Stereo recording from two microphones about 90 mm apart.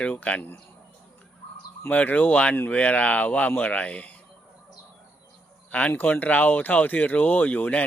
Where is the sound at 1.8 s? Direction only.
20° left (ahead or behind).